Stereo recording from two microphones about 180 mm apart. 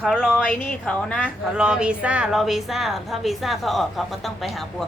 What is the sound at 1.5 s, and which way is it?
Speech, 5° right (ahead or behind).